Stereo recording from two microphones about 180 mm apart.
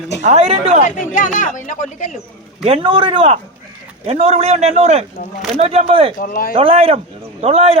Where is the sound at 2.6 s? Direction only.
30° right (ahead or behind).